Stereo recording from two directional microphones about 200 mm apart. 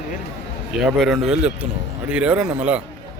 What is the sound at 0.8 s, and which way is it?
Speech, centre (ahead or behind).